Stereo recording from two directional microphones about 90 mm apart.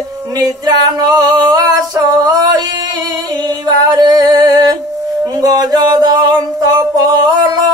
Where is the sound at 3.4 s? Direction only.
50° right (ahead or behind).